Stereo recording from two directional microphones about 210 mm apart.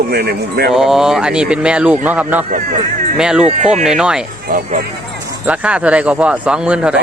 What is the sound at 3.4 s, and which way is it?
Speech, 30° right (ahead or behind).